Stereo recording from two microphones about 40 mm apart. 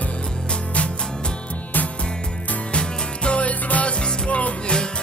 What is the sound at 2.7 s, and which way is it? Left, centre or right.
Music, left.